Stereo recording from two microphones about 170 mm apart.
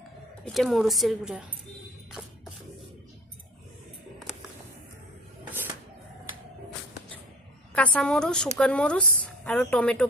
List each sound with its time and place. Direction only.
0.5 s a woman's voice: centre (ahead or behind)
7.7 s a woman's voice: 5° left (ahead or behind)